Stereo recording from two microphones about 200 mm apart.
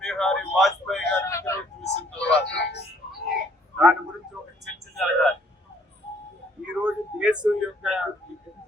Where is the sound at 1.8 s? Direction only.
5° left (ahead or behind).